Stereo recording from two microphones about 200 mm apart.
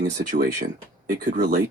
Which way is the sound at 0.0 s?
45° right (ahead or behind).